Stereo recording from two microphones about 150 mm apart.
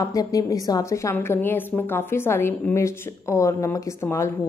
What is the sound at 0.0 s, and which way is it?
A woman's voice, 25° left (ahead or behind).